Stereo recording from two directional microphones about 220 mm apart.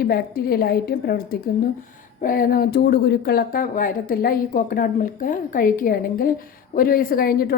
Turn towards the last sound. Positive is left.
turn(degrees=40)  # may be behind; listen again after turning